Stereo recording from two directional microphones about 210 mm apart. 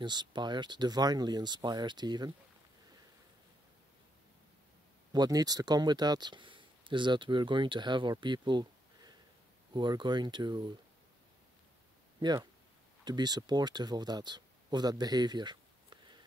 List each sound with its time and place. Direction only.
0.0 s speech: 20° right (ahead or behind)
5.1 s speech: 20° right (ahead or behind)
12.2 s speech: 20° right (ahead or behind)